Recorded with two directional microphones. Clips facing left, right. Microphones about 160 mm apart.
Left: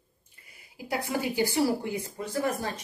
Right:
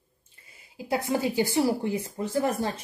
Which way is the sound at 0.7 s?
25° right (ahead or behind).